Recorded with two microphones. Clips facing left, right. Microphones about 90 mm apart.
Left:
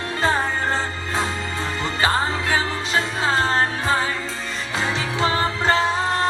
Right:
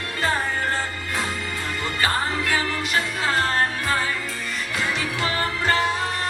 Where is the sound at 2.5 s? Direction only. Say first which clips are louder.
Left 2 dB; 25° left (ahead or behind).